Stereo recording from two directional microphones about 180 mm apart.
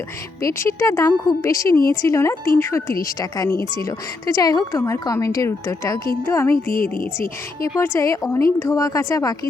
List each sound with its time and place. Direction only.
0.4 s speech: 15° left (ahead or behind)
7.8 s speech: 15° left (ahead or behind)